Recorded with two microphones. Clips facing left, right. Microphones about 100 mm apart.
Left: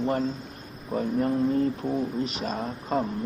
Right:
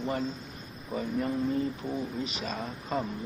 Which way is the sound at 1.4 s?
Centre (ahead or behind).